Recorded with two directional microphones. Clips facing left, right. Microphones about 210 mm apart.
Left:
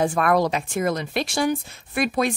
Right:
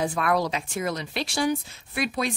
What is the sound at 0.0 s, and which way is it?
A woman's voice, 50° left (ahead or behind).